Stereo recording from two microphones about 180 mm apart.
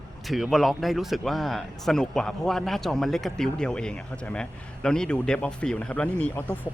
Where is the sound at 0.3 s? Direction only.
Centre (ahead or behind).